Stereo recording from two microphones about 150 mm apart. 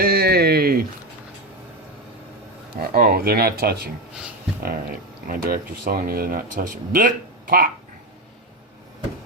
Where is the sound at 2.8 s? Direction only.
90° right.